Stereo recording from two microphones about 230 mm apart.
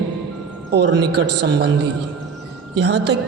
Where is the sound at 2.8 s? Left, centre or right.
Right.